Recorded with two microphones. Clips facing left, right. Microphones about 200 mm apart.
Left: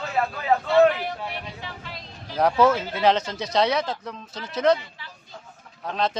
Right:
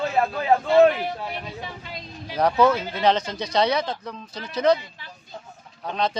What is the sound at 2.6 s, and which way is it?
Speech, 5° left (ahead or behind).